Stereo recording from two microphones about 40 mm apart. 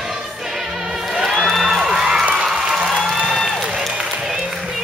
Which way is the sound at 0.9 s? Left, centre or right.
Centre.